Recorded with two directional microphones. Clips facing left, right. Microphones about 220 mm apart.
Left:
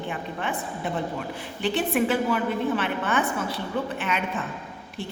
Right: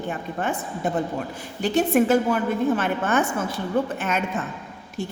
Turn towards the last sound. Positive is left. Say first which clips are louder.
# right 3 dB
turn(degrees=-45)  # may be behind; listen again after turning